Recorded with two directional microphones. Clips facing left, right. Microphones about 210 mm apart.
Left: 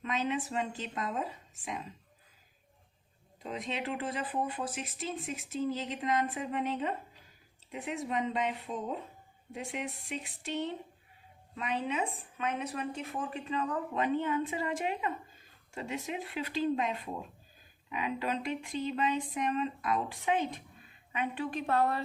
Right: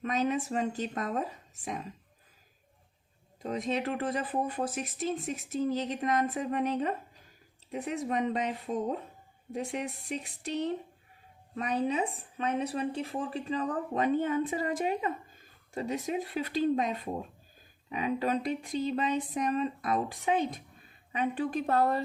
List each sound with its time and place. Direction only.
0.0 s speech: 45° right (ahead or behind)
3.4 s a woman's voice: 45° right (ahead or behind)